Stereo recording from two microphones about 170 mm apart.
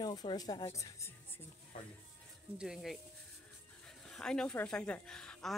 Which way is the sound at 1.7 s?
50° left (ahead or behind).